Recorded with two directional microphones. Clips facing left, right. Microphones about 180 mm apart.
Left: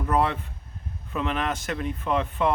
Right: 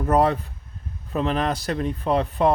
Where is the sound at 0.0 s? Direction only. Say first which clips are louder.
Right 5 dB; 40° right (ahead or behind).